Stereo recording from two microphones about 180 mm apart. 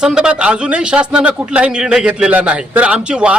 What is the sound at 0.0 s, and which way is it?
A man's voice, 5° right (ahead or behind).